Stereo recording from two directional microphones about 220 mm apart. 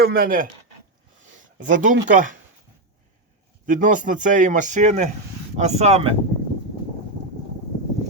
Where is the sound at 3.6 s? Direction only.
35° right (ahead or behind).